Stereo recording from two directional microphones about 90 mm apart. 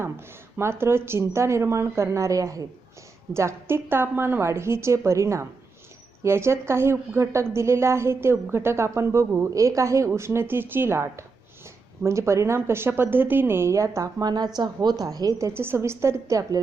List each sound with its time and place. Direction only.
0.0 s speech: 30° right (ahead or behind)